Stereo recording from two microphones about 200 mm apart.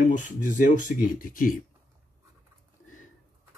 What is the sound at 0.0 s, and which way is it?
Speech, 40° left (ahead or behind).